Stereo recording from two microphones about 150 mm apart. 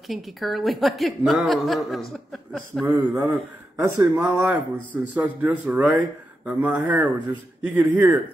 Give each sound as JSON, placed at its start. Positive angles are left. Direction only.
{"t": 0.1, "sound": "a woman's voice", "side_deg": 0}
{"t": 2.8, "sound": "speech", "side_deg": -15}